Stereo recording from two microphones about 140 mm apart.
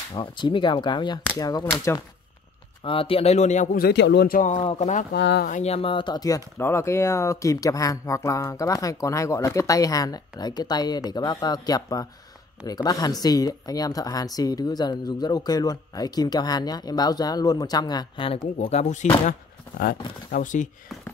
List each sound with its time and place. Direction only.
0.1 s speech: 35° left (ahead or behind)
2.8 s a man's voice: 40° left (ahead or behind); by 4.6 s 80° left
4.6 s speech: 50° left (ahead or behind)
18.7 s a man's voice: 55° left (ahead or behind)
20.2 s speech: 70° left (ahead or behind)